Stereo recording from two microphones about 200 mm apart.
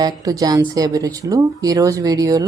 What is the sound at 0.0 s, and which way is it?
Speech, 20° right (ahead or behind).